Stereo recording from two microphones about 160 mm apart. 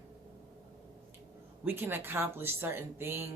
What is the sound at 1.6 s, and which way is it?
Speech, 15° right (ahead or behind).